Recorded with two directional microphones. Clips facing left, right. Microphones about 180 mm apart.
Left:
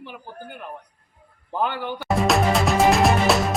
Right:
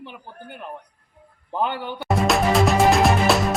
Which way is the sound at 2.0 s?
Centre (ahead or behind).